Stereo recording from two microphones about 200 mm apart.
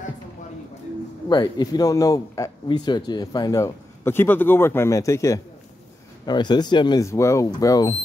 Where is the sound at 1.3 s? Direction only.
20° left (ahead or behind).